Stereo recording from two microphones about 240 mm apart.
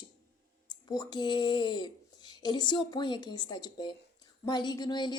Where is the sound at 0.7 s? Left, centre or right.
Centre.